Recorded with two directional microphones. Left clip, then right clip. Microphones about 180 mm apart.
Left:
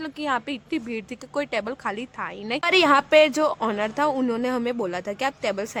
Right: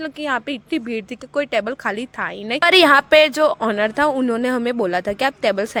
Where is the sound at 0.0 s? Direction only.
20° right (ahead or behind).